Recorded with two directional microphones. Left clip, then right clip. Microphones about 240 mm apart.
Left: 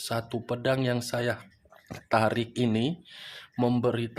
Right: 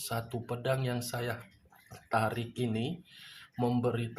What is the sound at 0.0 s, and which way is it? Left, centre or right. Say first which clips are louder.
Speech: left 5 dB; left.